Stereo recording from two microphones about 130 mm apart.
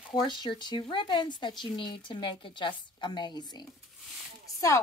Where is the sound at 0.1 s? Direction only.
35° left (ahead or behind).